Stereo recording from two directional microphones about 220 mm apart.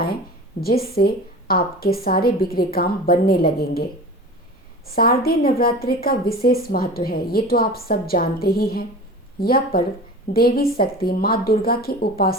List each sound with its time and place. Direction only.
0.6 s a woman's voice: 45° left (ahead or behind)
4.9 s a woman's voice: 40° left (ahead or behind)